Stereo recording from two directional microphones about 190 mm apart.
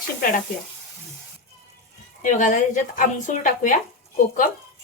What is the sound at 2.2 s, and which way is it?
Speech, 40° left (ahead or behind).